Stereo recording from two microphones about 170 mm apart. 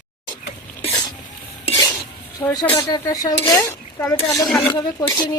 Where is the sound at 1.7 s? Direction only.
25° left (ahead or behind).